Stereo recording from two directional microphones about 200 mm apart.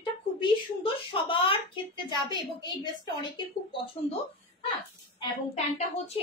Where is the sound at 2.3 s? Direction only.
20° left (ahead or behind).